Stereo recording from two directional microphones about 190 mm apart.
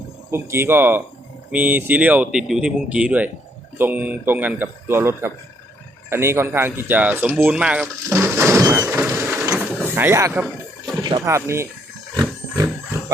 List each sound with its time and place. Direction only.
0.3 s speech: 15° right (ahead or behind)
7.3 s a sound: 5° right (ahead or behind)
11.0 s speech: 20° right (ahead or behind)
12.1 s wild animals: 15° right (ahead or behind)